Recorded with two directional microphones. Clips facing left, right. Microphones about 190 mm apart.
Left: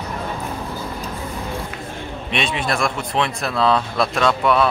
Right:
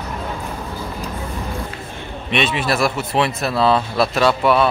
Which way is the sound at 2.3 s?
5° right (ahead or behind).